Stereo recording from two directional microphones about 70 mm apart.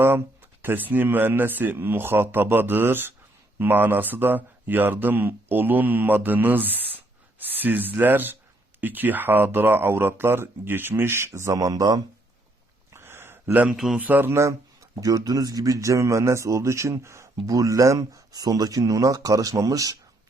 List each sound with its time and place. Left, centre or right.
0.6 s speech: right
11.5 s a man's voice: right
12.9 s a sound: right
13.7 s a man's voice: centre
13.9 s speech: right
15.0 s a man's voice: right